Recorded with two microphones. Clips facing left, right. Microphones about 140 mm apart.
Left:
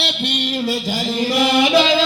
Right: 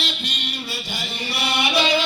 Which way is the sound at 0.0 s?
65° left (ahead or behind).